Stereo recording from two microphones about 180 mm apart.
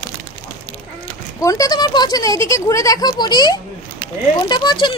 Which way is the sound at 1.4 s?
20° left (ahead or behind).